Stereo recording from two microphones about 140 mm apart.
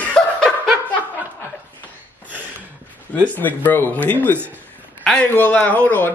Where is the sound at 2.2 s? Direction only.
10° right (ahead or behind).